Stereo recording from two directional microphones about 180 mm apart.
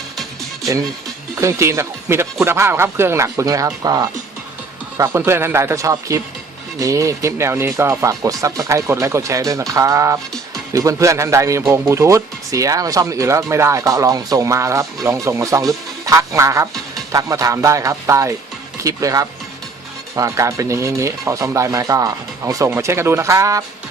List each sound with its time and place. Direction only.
1.4 s speech: 15° right (ahead or behind)